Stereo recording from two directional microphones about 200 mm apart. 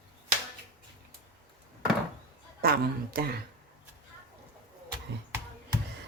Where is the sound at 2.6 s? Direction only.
50° right (ahead or behind).